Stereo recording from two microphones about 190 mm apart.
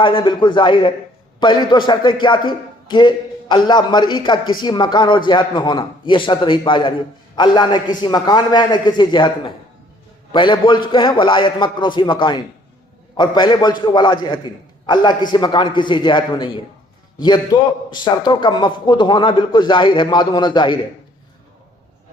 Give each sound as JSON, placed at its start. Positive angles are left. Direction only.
{"t": 0.0, "sound": "a man's voice", "side_deg": 25}